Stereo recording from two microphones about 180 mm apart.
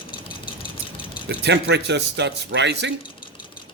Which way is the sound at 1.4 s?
70° right (ahead or behind).